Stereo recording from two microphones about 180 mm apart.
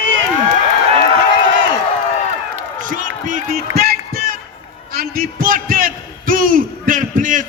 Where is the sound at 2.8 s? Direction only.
45° right (ahead or behind).